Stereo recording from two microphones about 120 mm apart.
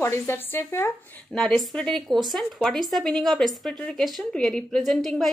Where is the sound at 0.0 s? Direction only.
20° left (ahead or behind).